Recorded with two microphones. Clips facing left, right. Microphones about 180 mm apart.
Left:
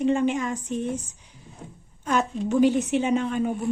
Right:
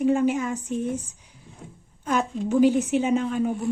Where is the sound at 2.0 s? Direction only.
10° right (ahead or behind).